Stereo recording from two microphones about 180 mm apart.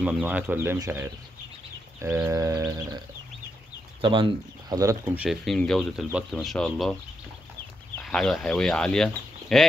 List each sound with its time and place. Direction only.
0.0 s speech: 5° right (ahead or behind)
4.0 s speech: 25° right (ahead or behind); by 7.0 s 5° left (ahead or behind)
8.0 s speech: centre (ahead or behind)